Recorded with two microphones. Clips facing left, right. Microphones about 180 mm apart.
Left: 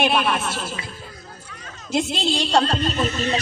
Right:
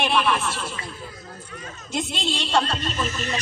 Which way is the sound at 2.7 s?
35° left (ahead or behind).